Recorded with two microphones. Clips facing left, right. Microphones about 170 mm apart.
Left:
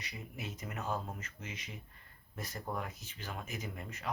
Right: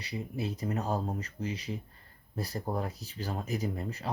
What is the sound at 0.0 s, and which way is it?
Speech, 35° right (ahead or behind).